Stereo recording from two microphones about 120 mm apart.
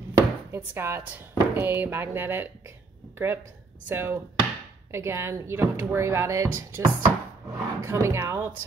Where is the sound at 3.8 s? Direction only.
20° right (ahead or behind).